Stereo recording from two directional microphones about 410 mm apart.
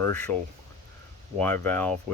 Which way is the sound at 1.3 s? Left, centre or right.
Centre.